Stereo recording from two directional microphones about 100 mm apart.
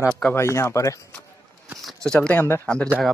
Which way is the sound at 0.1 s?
20° left (ahead or behind).